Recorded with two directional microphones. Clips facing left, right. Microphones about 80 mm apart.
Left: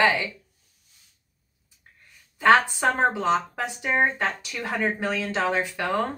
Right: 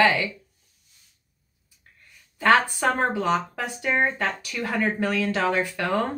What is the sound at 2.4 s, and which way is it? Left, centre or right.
A woman's voice, centre.